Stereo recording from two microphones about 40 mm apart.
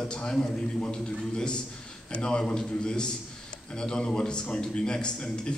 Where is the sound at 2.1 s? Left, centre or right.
Left.